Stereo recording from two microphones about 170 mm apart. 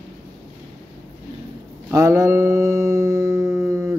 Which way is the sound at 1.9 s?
20° right (ahead or behind).